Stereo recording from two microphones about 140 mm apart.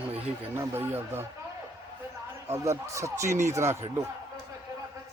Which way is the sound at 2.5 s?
20° right (ahead or behind).